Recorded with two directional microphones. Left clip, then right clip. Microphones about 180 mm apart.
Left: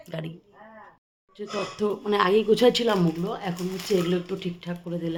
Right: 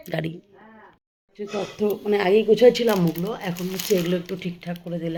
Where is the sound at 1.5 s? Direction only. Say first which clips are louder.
Right 2 dB; centre (ahead or behind).